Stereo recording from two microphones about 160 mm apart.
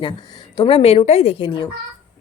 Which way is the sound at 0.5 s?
30° left (ahead or behind).